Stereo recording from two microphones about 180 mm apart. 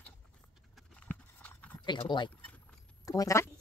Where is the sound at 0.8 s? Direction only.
5° left (ahead or behind).